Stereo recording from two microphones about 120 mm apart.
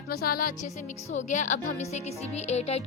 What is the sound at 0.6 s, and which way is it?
A woman's voice, 85° left.